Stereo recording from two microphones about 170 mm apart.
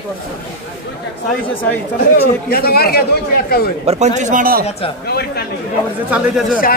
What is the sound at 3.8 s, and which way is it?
Speech, 40° right (ahead or behind).